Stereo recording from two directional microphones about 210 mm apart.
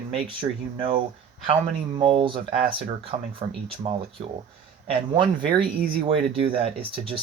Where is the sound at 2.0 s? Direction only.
25° right (ahead or behind).